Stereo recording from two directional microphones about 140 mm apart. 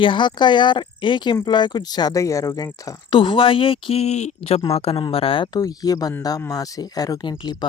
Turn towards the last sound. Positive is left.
turn(degrees=30)  # may be behind; listen again after turning